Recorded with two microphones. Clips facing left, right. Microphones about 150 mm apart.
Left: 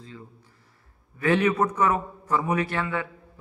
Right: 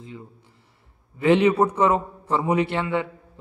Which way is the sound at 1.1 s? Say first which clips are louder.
Right 5 dB; 20° right (ahead or behind).